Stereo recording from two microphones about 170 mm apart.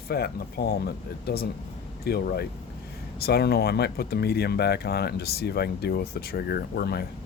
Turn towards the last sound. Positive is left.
turn(degrees=70)  # may be behind; listen again after turning